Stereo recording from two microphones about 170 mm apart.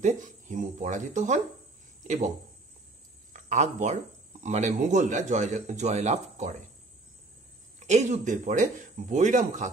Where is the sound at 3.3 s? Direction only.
45° right (ahead or behind).